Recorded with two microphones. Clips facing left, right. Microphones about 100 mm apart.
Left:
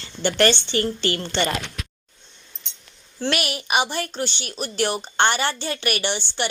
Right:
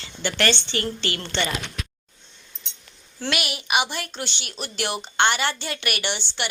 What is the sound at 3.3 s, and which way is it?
A woman's voice, 40° left (ahead or behind).